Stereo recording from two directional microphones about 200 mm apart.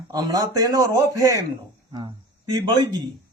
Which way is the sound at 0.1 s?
20° right (ahead or behind).